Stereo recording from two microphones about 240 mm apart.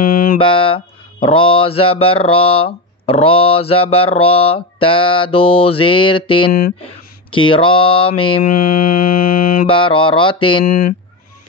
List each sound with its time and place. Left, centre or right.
0.0 s mantra: left
0.4 s speech: left
6.5 s speech: left
7.2 s speech: left
8.5 s mantra: left
9.7 s speech: left
10.6 s speech: left